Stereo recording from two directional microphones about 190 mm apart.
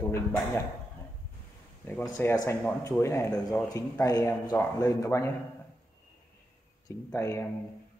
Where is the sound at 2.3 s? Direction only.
15° left (ahead or behind).